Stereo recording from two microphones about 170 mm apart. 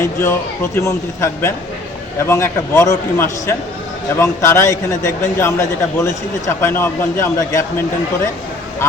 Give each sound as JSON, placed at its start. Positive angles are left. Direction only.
{"t": 0.0, "sound": "a man's voice", "side_deg": 15}